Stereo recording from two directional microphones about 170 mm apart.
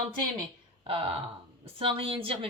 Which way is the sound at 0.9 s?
30° right (ahead or behind).